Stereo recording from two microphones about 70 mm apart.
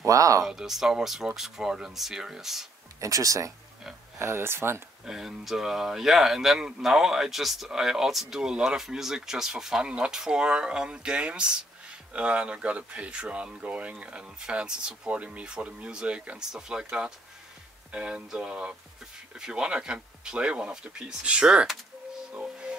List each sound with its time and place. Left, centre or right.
0.0 s speech: right
0.5 s speech: centre
3.0 s speech: right
4.2 s speech: right
5.0 s speech: centre
22.3 s music: centre